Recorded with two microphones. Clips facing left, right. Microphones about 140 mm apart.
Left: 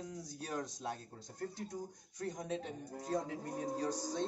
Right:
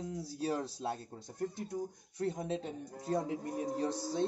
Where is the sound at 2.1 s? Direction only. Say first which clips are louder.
Right 4 dB; 30° right (ahead or behind).